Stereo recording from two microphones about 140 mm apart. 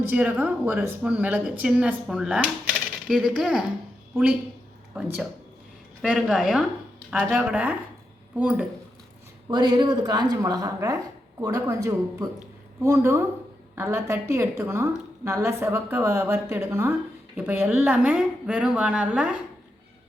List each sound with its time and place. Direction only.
0.0 s a woman's voice: 15° right (ahead or behind)
9.5 s a woman's voice: 30° right (ahead or behind); by 19.4 s 10° right (ahead or behind)